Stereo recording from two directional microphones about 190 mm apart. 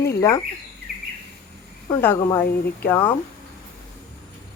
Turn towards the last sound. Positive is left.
turn(degrees=10)  # may be behind; listen again after turning